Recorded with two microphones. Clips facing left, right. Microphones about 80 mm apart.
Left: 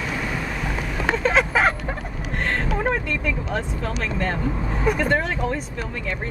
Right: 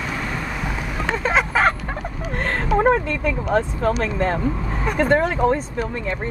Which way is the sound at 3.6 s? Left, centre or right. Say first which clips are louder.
Right 7 dB; right.